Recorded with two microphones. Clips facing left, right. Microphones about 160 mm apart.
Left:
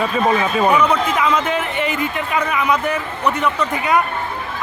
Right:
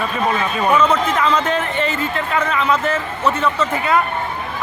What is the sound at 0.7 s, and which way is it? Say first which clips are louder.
A man's voice: even; 10° left (ahead or behind).